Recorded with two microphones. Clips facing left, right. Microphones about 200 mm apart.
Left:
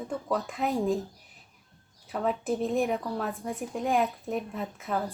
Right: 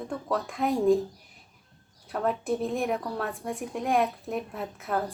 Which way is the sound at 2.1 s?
Centre (ahead or behind).